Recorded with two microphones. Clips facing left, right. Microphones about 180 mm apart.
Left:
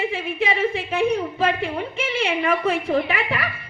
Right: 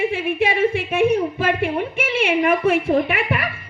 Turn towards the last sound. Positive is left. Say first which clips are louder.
# right 3 dB
turn(degrees=-60)  # may be behind; listen again after turning